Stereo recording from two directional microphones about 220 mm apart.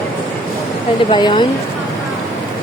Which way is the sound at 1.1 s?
20° left (ahead or behind).